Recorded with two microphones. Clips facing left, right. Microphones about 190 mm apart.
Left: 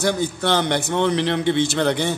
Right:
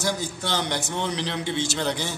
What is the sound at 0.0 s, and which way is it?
A man's voice, 60° left (ahead or behind).